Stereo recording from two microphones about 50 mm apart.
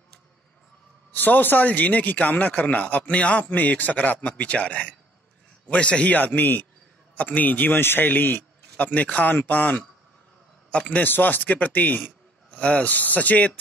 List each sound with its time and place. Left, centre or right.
1.1 s a man's voice: left
7.2 s a man's voice: left
10.7 s a man's voice: left
11.1 s a man's voice: left
12.5 s speech: left
12.8 s a man's voice: left